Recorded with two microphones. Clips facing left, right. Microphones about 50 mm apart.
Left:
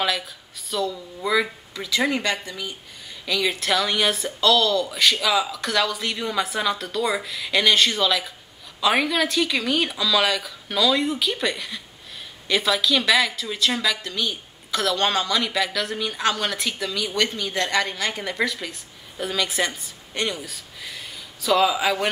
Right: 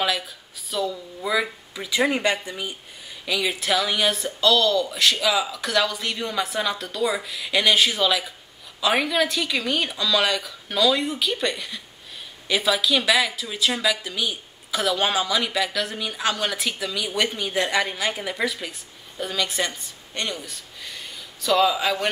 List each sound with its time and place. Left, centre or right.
0.7 s speech: centre
1.9 s speech: centre
3.3 s speech: centre